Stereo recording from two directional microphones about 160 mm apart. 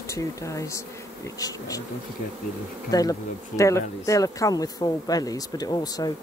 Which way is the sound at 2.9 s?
20° left (ahead or behind).